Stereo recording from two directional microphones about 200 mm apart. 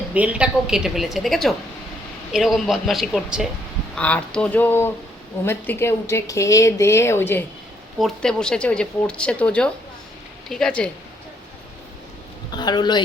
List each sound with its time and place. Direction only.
0.1 s speech: 5° right (ahead or behind); by 7.4 s 10° left (ahead or behind)
7.9 s speech: centre (ahead or behind)
12.5 s a man's voice: 20° left (ahead or behind)